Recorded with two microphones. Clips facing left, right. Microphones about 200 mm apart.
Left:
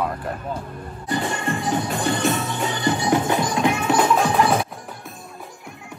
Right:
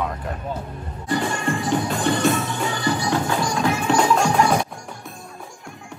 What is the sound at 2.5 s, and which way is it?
Music, 20° left (ahead or behind).